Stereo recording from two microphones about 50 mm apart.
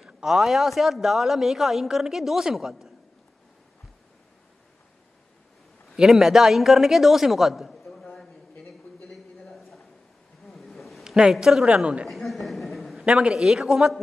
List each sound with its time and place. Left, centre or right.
0.0 s a man's voice: centre
5.9 s a man's voice: centre
9.1 s a sound: centre
11.1 s a man's voice: centre
11.7 s a woman's voice: right
12.1 s a sound: centre
13.0 s a man's voice: centre